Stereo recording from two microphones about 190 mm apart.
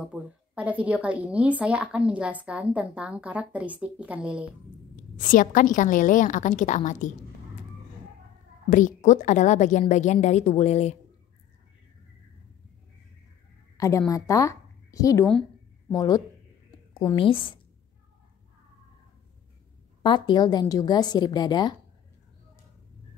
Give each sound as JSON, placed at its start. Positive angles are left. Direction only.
{"t": 0.0, "sound": "a woman's voice", "side_deg": -5}
{"t": 5.1, "sound": "a woman's voice", "side_deg": 45}
{"t": 8.6, "sound": "a woman's voice", "side_deg": 40}
{"t": 13.7, "sound": "a woman's voice", "side_deg": 15}
{"t": 20.0, "sound": "a woman's voice", "side_deg": 25}